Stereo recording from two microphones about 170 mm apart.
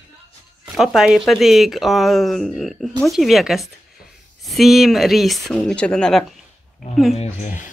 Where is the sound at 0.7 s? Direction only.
5° right (ahead or behind).